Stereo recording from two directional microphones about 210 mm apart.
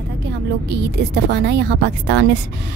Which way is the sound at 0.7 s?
55° right (ahead or behind).